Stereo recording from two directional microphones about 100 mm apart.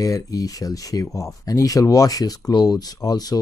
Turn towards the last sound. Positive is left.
turn(degrees=40)  # may be behind; listen again after turning